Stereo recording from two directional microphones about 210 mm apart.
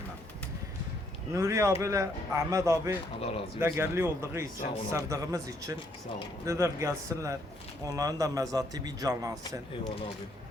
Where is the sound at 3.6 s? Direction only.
10° right (ahead or behind).